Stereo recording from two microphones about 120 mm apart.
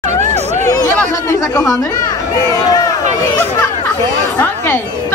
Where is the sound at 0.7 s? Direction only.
25° left (ahead or behind).